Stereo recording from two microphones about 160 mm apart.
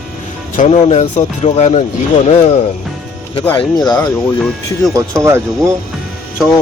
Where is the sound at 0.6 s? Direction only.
45° left (ahead or behind).